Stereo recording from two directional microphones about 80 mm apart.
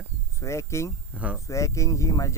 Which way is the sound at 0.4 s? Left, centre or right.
Left.